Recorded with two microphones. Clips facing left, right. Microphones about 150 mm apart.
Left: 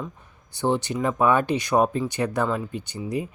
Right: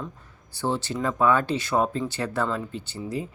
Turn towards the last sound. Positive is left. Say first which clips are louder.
# left 3 dB
turn(degrees=15)  # may be behind; listen again after turning